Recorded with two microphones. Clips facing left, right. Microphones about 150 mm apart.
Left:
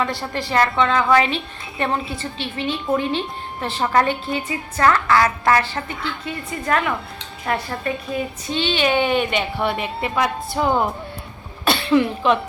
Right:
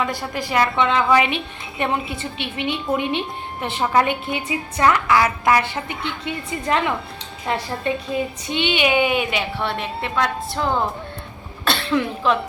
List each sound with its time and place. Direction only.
0.0 s a woman's voice: 10° right (ahead or behind); by 10.8 s 10° left (ahead or behind)
11.6 s throat clearing: 5° left (ahead or behind)